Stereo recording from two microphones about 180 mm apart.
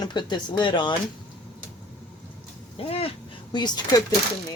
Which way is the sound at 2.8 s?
30° left (ahead or behind).